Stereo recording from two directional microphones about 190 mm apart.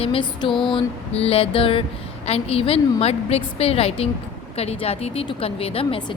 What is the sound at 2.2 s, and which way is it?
A woman's voice, 30° left (ahead or behind).